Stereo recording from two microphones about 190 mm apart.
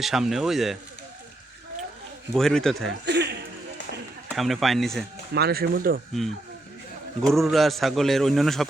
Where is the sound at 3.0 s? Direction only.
65° right (ahead or behind).